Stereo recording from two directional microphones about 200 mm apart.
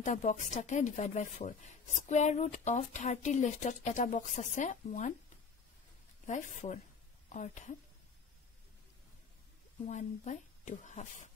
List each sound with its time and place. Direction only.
0.0 s speech: 40° left (ahead or behind)
6.2 s speech: 40° left (ahead or behind)
9.8 s speech: 35° left (ahead or behind)